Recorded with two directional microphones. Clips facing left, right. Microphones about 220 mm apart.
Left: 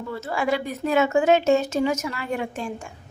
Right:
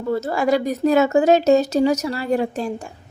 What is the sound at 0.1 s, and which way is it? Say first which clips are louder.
Speech: right 6 dB; 40° right (ahead or behind).